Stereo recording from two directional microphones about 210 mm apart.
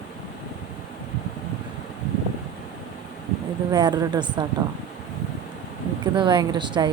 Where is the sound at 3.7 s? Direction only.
20° right (ahead or behind).